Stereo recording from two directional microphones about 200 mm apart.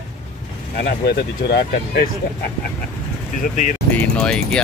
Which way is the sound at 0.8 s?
55° left (ahead or behind).